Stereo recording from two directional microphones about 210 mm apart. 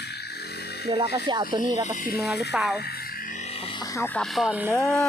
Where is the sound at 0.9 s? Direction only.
25° right (ahead or behind).